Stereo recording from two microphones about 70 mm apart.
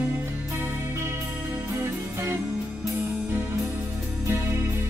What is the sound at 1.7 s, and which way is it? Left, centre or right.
Music, right.